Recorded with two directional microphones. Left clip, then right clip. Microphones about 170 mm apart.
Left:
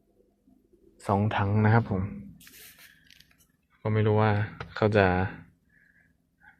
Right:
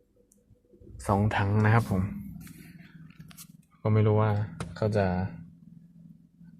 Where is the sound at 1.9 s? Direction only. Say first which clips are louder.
Even; centre (ahead or behind).